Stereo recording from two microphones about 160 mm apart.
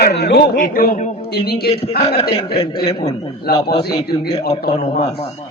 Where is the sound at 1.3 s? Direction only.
80° left.